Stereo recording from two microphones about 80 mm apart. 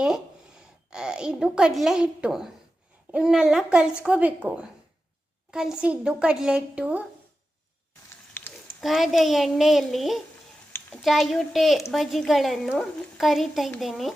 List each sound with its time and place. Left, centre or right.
0.9 s a child's voice: centre
8.3 s a sound: left
8.8 s a child's voice: centre